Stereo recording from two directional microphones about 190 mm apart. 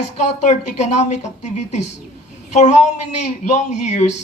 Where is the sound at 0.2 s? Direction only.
40° left (ahead or behind).